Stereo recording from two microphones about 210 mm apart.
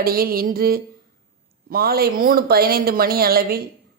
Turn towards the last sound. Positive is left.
turn(degrees=-45)  # may be behind; listen again after turning